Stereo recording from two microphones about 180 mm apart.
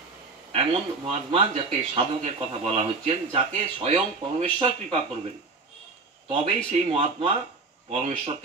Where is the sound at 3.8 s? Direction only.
35° right (ahead or behind).